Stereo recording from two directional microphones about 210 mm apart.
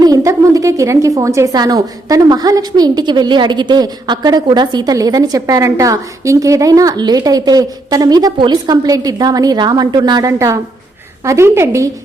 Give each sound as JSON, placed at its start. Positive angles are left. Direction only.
{"t": 0.0, "sound": "a woman's voice", "side_deg": -15}